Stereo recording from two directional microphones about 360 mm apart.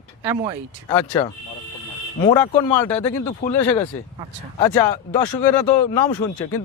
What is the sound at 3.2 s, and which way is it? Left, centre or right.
Speech, centre.